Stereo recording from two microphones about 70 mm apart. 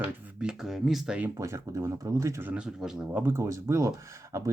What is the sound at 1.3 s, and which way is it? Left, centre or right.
Speech, right.